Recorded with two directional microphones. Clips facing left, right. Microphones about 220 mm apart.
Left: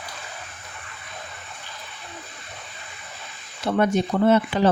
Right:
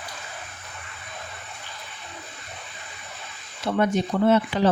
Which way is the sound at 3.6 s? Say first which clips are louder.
Left 2 dB; 50° left (ahead or behind).